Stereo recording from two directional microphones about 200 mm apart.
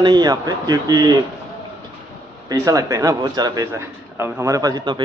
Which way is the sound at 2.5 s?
15° right (ahead or behind).